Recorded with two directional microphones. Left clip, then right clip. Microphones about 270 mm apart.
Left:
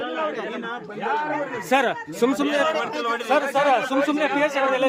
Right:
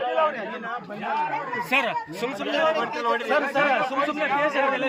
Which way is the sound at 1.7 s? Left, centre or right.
Centre.